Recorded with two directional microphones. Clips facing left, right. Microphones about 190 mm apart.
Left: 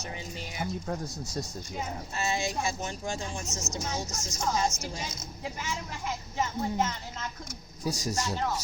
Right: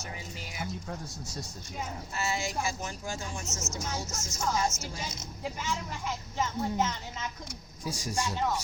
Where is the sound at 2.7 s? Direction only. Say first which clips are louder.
Left 3 dB; 30° left (ahead or behind).